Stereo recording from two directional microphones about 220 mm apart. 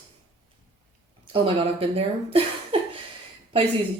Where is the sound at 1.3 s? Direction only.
25° right (ahead or behind).